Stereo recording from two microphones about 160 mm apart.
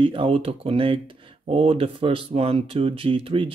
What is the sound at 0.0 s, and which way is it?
Speech, 35° right (ahead or behind).